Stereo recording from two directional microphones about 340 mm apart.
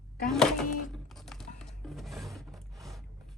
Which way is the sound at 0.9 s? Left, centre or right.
Centre.